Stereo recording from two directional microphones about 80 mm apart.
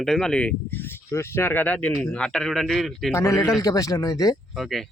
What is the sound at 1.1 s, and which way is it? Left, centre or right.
Speech, left.